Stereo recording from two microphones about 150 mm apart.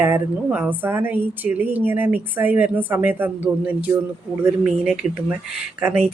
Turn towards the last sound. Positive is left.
turn(degrees=-10)  # may be behind; listen again after turning